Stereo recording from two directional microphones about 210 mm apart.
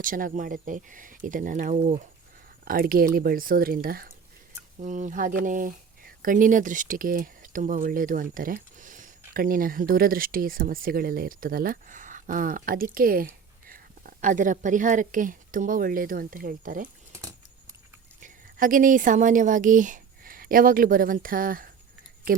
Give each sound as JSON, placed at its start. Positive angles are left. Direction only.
{"t": 0.0, "sound": "speech", "side_deg": -40}
{"t": 2.6, "sound": "speech", "side_deg": -45}
{"t": 17.2, "sound": "a sound", "side_deg": -15}
{"t": 18.2, "sound": "a woman's voice", "side_deg": -40}